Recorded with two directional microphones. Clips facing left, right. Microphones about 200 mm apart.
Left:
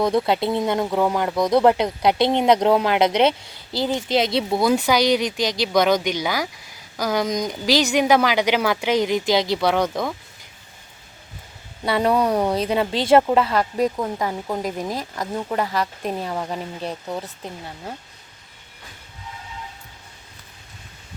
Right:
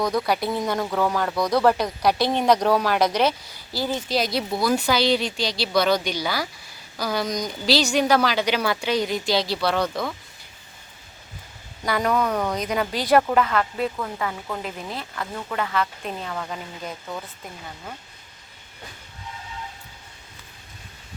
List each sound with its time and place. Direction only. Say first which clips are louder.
0.0 s a woman's voice: left 4 dB; 25° left (ahead or behind)
11.8 s speech: left 3 dB; 30° left (ahead or behind)